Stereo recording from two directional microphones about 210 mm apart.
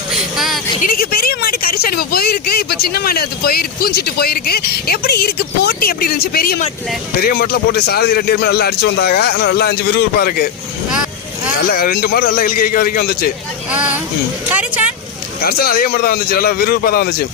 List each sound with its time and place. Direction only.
0.1 s vehicle: centre (ahead or behind)
0.8 s speech: 45° left (ahead or behind)
11.7 s speech: 45° left (ahead or behind)
13.7 s speech: 5° right (ahead or behind)
15.4 s speech: 45° left (ahead or behind)